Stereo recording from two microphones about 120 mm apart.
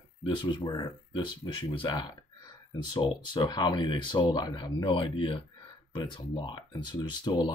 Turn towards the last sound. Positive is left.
turn(degrees=40)  # may be behind; listen again after turning